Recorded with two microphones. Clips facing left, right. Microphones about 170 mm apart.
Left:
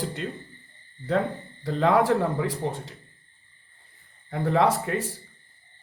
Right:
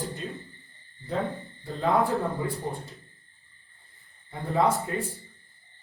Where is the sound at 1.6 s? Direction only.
90° left.